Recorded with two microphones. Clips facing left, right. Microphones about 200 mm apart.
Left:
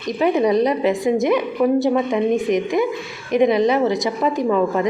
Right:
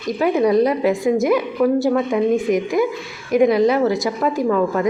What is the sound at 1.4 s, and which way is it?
Speech, 20° left (ahead or behind).